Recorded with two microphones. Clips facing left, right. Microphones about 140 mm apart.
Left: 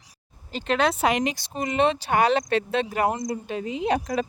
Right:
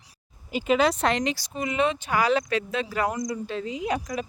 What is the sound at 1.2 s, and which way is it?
Speech, 20° left (ahead or behind).